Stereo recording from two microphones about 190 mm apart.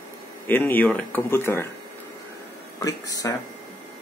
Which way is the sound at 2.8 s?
20° left (ahead or behind).